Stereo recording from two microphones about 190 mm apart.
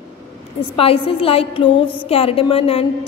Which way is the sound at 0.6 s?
30° left (ahead or behind).